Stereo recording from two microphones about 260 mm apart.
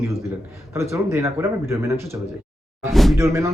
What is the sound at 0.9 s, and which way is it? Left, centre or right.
Speech, centre.